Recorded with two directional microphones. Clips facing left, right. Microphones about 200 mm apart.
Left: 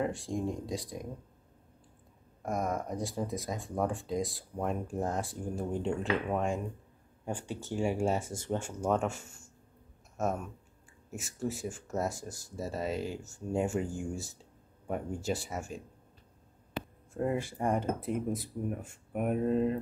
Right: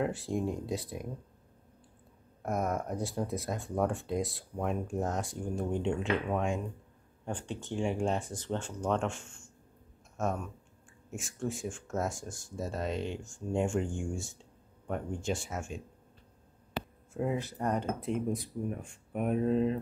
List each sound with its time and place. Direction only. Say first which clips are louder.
0.0 s speech: right 1 dB; 5° right (ahead or behind)
2.4 s speech: right 1 dB; centre (ahead or behind)
16.8 s a sound: right 1 dB; 90° right
17.1 s speech: left 1 dB; centre (ahead or behind)
17.4 s speech: left 1 dB; 10° left (ahead or behind)